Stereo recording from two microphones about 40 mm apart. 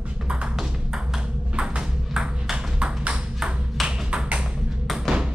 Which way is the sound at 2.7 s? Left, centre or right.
Right.